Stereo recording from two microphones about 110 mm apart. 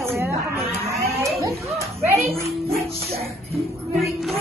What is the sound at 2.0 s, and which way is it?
Speech, 25° right (ahead or behind).